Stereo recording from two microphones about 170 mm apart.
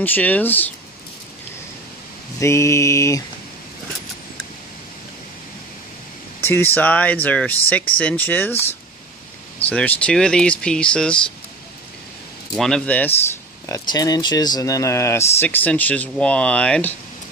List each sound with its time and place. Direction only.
0.0 s speech: 10° left (ahead or behind)
2.3 s speech: 15° left (ahead or behind)
6.4 s speech: 10° left (ahead or behind)
9.7 s speech: 10° left (ahead or behind)
12.5 s speech: 5° left (ahead or behind)
13.7 s speech: 20° left (ahead or behind)